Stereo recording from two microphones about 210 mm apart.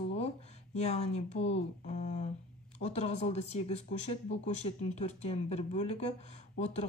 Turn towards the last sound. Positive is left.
turn(degrees=30)  # may be behind; listen again after turning